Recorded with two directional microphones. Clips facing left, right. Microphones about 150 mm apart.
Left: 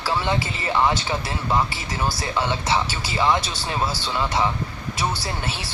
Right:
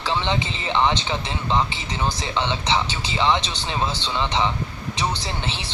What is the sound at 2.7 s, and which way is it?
Speech, 10° left (ahead or behind).